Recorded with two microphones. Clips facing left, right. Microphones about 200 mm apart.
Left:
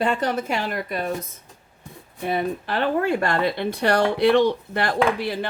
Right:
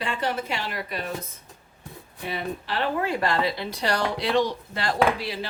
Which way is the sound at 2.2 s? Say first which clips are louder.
Left 7 dB; 50° left (ahead or behind).